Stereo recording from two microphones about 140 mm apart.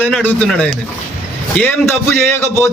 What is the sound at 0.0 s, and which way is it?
Speech, 15° left (ahead or behind).